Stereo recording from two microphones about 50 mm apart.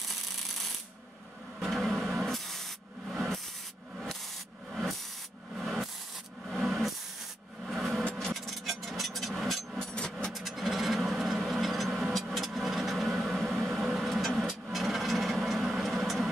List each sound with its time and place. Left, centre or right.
0.1 s a sound: centre
1.6 s vehicle: centre
2.2 s spray: centre
4.7 s rub: centre
6.5 s a sound: centre
8.0 s filing: left
8.3 s hammer: centre
9.8 s vehicle: centre
10.3 s vehicle: centre
13.2 s a sound: centre
13.7 s vehicle: centre
14.0 s vehicle: centre